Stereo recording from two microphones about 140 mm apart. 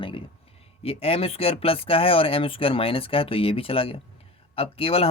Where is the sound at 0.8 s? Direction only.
45° left (ahead or behind).